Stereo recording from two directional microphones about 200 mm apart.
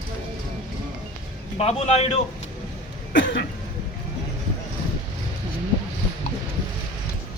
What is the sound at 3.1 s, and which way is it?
Cough, 65° left (ahead or behind).